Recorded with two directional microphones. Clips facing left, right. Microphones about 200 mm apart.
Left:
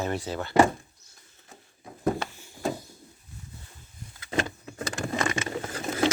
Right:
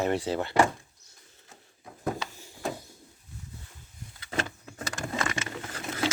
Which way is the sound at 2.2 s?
35° right (ahead or behind).